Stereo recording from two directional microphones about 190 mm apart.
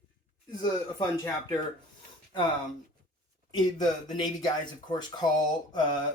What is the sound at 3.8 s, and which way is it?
Speech, 20° left (ahead or behind).